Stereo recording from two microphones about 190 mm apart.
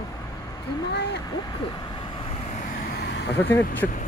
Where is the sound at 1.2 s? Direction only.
20° left (ahead or behind).